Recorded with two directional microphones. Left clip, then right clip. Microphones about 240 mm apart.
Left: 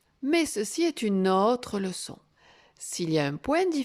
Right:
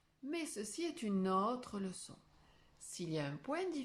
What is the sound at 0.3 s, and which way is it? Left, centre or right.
Speech, left.